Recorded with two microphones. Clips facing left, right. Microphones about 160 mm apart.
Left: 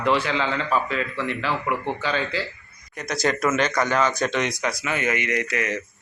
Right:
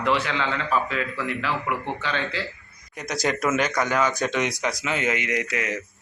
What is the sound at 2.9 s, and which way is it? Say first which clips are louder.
Speech: left 2 dB; 15° right (ahead or behind).